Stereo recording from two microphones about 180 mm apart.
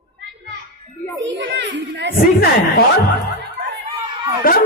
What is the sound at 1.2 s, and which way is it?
Children playing, 85° right.